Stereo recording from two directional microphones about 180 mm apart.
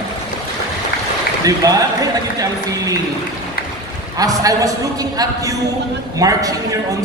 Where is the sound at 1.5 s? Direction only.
20° right (ahead or behind).